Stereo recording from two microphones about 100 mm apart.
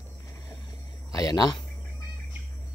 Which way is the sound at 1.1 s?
40° left (ahead or behind).